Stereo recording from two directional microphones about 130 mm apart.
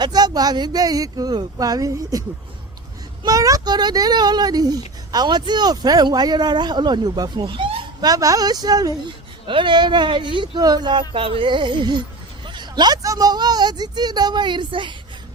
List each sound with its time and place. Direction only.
0.0 s speech: 30° right (ahead or behind)
3.2 s speech: 25° right (ahead or behind)
8.1 s speech: 25° right (ahead or behind)